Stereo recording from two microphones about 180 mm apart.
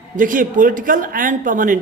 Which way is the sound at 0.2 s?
50° right (ahead or behind).